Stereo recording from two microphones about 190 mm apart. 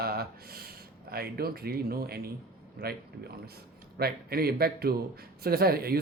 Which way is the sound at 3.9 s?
55° right (ahead or behind).